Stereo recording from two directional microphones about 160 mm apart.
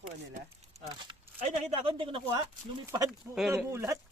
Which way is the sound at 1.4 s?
40° right (ahead or behind).